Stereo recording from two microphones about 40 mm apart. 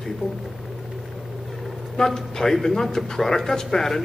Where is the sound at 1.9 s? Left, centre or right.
Centre.